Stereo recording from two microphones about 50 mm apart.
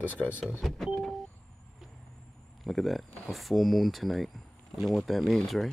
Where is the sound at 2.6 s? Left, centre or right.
Centre.